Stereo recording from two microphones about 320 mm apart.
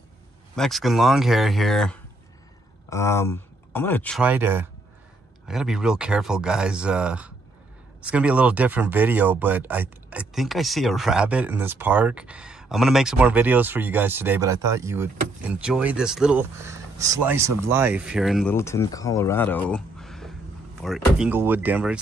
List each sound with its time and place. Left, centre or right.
0.6 s speech: centre